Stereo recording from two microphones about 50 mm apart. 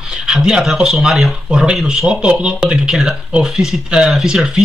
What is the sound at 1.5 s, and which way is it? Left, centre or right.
Speech, centre.